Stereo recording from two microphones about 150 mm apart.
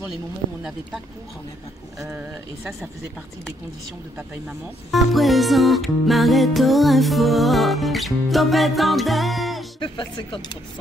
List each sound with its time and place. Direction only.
0.1 s music: 5° right (ahead or behind)
2.0 s speech: 15° right (ahead or behind)
4.9 s music: centre (ahead or behind)
9.8 s speech: 30° left (ahead or behind)